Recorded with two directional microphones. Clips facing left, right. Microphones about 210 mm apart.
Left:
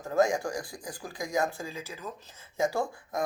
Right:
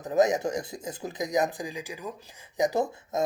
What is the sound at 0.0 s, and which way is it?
Speech, 20° right (ahead or behind).